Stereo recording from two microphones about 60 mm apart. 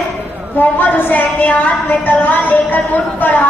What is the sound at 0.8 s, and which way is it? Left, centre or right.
A woman's voice, left.